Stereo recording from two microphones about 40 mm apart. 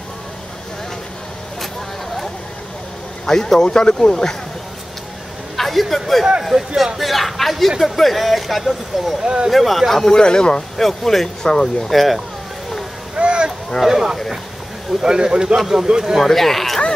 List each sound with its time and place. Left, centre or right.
3.3 s speech: centre
5.6 s a sound: centre
6.5 s speech: centre
7.0 s speech: centre
9.2 s speech: right
9.5 s speech: centre
10.0 s speech: centre
10.8 s speech: centre
11.9 s speech: centre
13.1 s a sound: right
13.8 s speech: centre
16.2 s speech: centre